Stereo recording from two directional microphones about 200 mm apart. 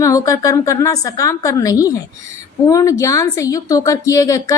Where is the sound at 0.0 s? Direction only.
15° left (ahead or behind).